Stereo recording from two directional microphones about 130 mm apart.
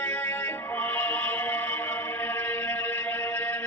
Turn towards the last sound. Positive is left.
turn(degrees=15)  # may be behind; listen again after turning